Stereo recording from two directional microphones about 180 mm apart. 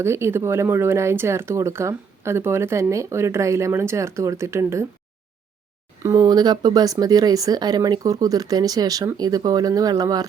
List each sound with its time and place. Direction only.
0.0 s speech: 15° right (ahead or behind)
6.0 s speech: 15° right (ahead or behind)